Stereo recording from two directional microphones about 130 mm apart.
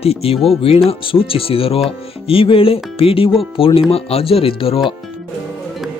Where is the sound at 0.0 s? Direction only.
50° left (ahead or behind).